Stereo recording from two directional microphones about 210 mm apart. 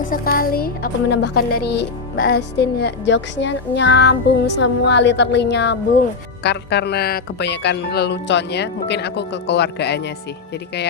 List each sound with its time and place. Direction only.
0.0 s speech: 40° left (ahead or behind)